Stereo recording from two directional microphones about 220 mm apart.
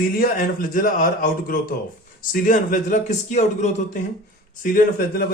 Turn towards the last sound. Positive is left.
turn(degrees=40)  # may be behind; listen again after turning